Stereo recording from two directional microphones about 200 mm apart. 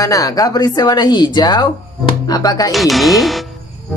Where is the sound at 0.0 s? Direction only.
15° left (ahead or behind).